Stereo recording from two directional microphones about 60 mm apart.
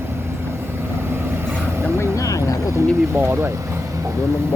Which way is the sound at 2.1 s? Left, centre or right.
Left.